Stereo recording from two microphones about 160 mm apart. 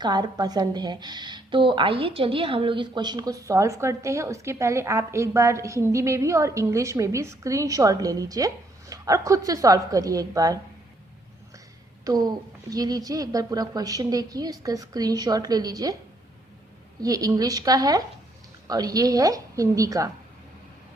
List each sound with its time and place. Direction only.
0.0 s speech: 25° right (ahead or behind)
12.0 s speech: 25° right (ahead or behind)
17.0 s speech: 20° right (ahead or behind)